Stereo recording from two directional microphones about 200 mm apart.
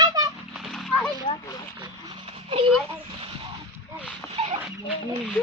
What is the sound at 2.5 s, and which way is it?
Speech, 30° right (ahead or behind).